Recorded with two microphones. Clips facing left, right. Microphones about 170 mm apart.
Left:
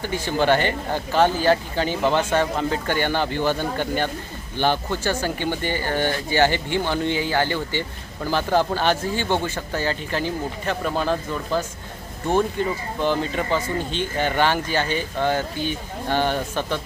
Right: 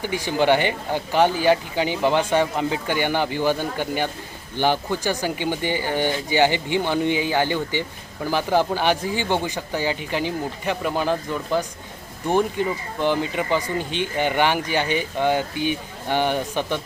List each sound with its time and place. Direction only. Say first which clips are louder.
0.0 s speech: right 1 dB; 15° right (ahead or behind)